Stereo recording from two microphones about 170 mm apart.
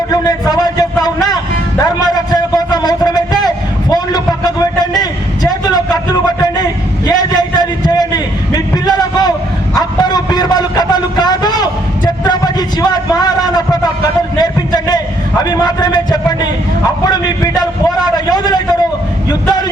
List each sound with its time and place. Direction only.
0.1 s a man's voice: 25° left (ahead or behind)
1.0 s vehicle: 25° left (ahead or behind)
1.8 s a sound: 25° left (ahead or behind)